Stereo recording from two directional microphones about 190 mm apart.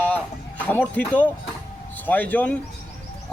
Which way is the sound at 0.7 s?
10° left (ahead or behind).